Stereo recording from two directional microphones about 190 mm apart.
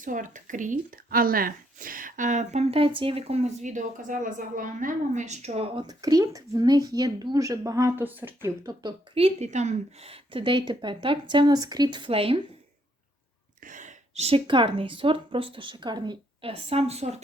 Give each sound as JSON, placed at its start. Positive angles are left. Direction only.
{"t": 0.0, "sound": "speech", "side_deg": -40}
{"t": 13.7, "sound": "speech", "side_deg": -40}